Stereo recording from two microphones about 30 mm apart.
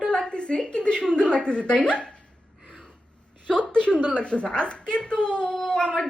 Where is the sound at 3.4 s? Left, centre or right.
Left.